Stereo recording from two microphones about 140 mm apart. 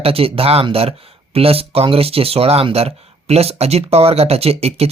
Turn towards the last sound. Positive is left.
turn(degrees=-45)  # may be behind; listen again after turning